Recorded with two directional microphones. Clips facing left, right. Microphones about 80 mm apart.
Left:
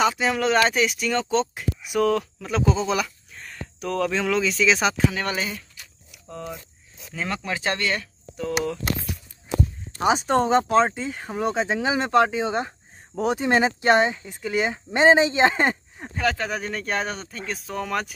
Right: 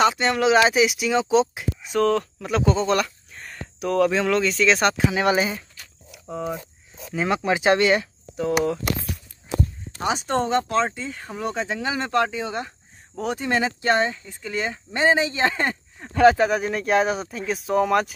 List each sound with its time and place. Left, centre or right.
0.0 s speech: centre
1.8 s speech: centre
5.1 s speech: centre
10.0 s speech: left
16.4 s speech: centre